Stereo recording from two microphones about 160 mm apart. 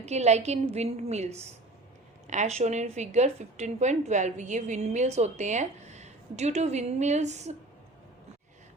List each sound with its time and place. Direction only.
0.0 s a woman's voice: 45° right (ahead or behind)